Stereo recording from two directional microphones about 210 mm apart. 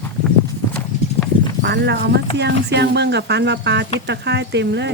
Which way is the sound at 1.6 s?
55° right (ahead or behind).